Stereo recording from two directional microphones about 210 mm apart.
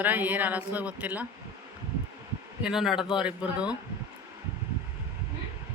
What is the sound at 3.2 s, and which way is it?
Speech, 5° right (ahead or behind).